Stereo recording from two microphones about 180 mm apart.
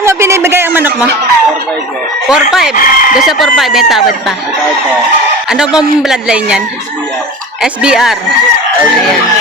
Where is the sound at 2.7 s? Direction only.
50° left (ahead or behind).